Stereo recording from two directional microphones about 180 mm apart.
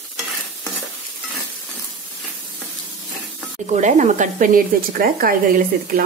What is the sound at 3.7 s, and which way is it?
Speech, 45° right (ahead or behind).